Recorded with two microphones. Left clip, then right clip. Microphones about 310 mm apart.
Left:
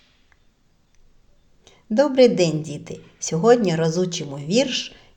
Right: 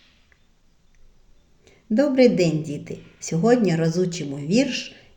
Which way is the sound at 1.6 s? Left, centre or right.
Centre.